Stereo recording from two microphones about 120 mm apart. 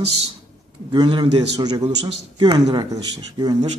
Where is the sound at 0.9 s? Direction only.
45° right (ahead or behind).